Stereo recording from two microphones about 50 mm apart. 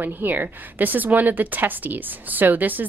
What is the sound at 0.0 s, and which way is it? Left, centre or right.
Speech, right.